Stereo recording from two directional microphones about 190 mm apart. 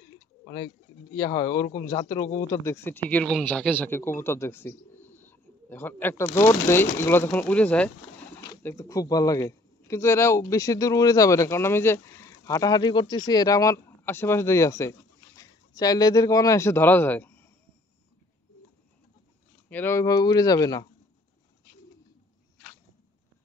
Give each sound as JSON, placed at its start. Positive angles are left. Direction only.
{"t": 1.1, "sound": "a man's voice", "side_deg": 20}
{"t": 19.7, "sound": "speech", "side_deg": 10}